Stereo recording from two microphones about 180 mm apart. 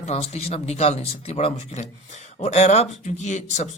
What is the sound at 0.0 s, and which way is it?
A man's voice, 35° left (ahead or behind).